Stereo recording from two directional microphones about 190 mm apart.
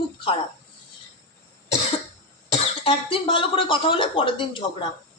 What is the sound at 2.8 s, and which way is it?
A woman's voice, 30° left (ahead or behind).